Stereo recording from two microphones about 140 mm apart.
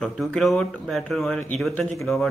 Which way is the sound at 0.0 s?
Centre (ahead or behind).